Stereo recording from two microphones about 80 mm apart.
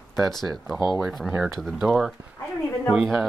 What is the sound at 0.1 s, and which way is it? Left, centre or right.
Speech, centre.